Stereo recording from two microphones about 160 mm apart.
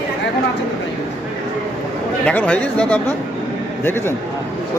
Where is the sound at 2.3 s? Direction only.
10° left (ahead or behind).